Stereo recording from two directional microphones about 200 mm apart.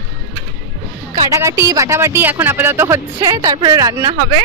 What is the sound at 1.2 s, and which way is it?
Speech, 15° right (ahead or behind).